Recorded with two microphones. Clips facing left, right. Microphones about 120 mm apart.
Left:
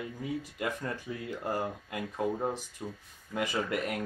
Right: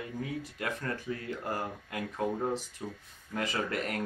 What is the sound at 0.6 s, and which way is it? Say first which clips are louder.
Speech: left 1 dB; 15° left (ahead or behind).